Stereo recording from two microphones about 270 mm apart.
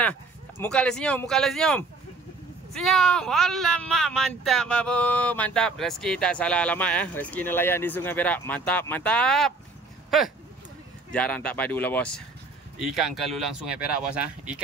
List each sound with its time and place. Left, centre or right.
0.6 s speech: centre